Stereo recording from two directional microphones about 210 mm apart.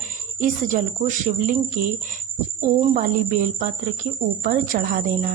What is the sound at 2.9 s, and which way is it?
Speech, 40° right (ahead or behind).